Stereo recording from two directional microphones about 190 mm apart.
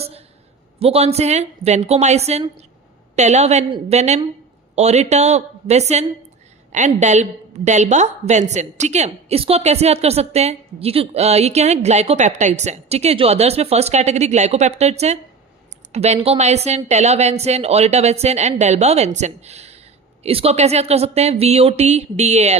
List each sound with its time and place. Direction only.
0.8 s a woman's voice: 30° right (ahead or behind)